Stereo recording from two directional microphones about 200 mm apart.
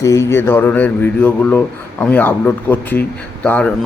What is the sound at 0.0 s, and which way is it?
Speech, 15° left (ahead or behind).